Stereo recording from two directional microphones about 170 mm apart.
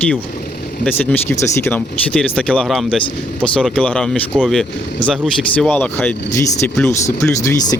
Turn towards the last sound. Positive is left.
turn(degrees=20)  # may be behind; listen again after turning